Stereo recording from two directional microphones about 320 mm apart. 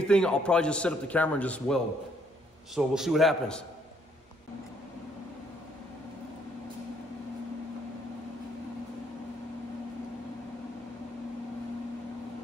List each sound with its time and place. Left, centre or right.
0.0 s a man's voice: centre